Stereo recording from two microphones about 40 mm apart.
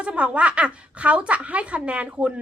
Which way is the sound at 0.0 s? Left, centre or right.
Right.